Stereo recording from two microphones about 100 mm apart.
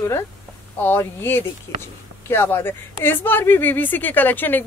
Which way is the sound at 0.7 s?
20° left (ahead or behind).